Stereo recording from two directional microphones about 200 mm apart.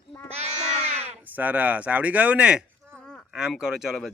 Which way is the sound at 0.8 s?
35° right (ahead or behind).